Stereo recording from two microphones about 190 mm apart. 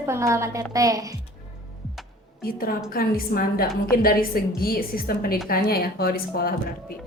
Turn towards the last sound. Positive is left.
turn(degrees=55)  # may be behind; listen again after turning